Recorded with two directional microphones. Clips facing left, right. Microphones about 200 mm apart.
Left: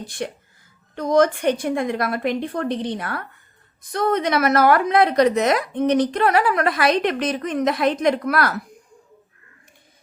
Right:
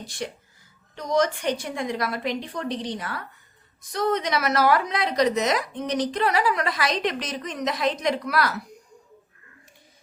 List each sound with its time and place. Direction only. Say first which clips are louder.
0.0 s a woman's voice: left 4 dB; 55° left (ahead or behind)